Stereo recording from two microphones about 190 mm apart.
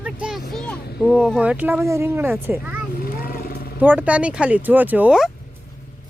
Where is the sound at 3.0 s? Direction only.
50° left (ahead or behind).